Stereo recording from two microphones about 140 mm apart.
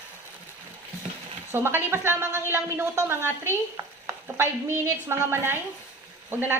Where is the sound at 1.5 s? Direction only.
15° right (ahead or behind).